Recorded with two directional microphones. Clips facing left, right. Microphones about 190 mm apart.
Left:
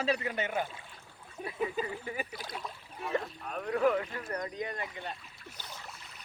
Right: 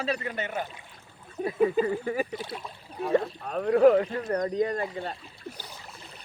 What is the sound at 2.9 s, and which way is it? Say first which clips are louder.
Speech: right 9 dB; 35° right (ahead or behind).